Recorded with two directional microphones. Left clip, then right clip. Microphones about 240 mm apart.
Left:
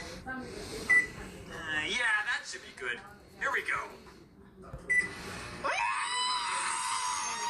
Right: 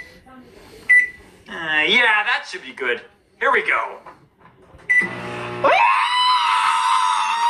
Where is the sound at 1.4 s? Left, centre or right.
Right.